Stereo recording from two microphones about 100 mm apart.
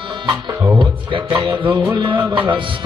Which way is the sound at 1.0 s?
55° right (ahead or behind).